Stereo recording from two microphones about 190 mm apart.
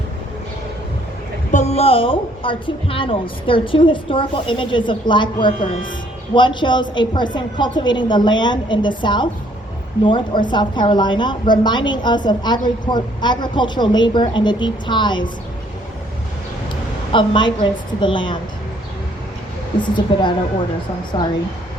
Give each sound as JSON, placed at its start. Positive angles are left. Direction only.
{"t": 1.5, "sound": "a woman's voice", "side_deg": 35}
{"t": 5.5, "sound": "speech", "side_deg": 45}
{"t": 6.3, "sound": "a woman's voice", "side_deg": 25}
{"t": 17.1, "sound": "a woman's voice", "side_deg": 25}
{"t": 20.1, "sound": "a woman's voice", "side_deg": 25}